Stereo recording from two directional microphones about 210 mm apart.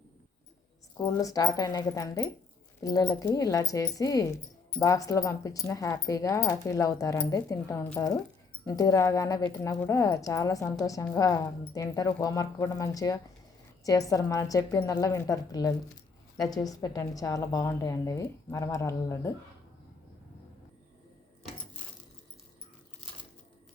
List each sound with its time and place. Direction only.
0.9 s speech: 15° left (ahead or behind)